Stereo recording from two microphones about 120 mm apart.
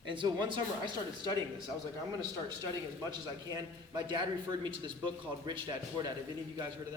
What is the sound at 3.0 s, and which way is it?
A man's voice, 35° right (ahead or behind).